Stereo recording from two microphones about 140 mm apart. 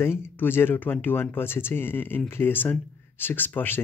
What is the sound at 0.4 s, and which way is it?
Speech, 15° left (ahead or behind).